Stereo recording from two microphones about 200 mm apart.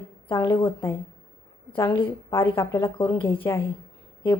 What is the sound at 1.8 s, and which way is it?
A woman's voice, 15° left (ahead or behind).